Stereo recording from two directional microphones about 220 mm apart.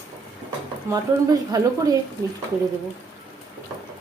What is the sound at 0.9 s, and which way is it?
A woman's voice, 15° right (ahead or behind).